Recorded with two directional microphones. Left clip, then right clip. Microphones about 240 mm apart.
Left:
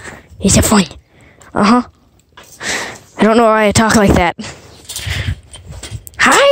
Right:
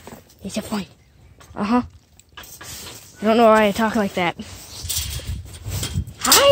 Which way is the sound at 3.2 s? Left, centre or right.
Left.